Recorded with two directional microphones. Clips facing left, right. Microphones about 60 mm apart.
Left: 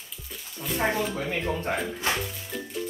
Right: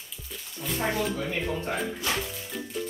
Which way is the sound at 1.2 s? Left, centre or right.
Centre.